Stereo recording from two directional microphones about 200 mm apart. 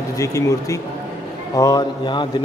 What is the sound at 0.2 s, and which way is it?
A man's voice, 15° left (ahead or behind).